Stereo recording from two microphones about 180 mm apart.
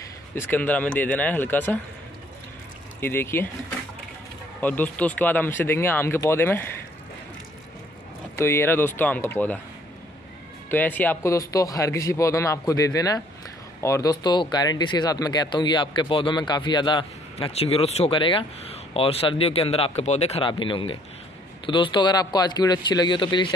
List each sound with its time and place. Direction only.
0.3 s speech: 10° left (ahead or behind)
3.0 s speech: 10° left (ahead or behind)
4.6 s speech: 10° left (ahead or behind)
8.4 s speech: 15° left (ahead or behind)
10.7 s speech: 10° left (ahead or behind); by 23.5 s 25° left (ahead or behind)